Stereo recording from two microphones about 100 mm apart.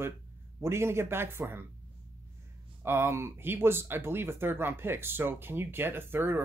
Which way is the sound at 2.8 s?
25° right (ahead or behind).